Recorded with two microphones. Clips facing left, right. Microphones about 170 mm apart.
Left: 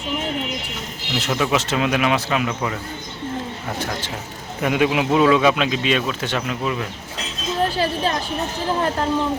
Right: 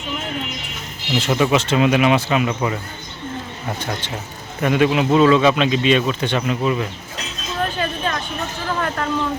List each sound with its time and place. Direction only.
1.1 s speech: centre (ahead or behind)
4.6 s speech: 10° left (ahead or behind)
7.8 s a sound: 35° left (ahead or behind)
8.6 s speech: 25° left (ahead or behind)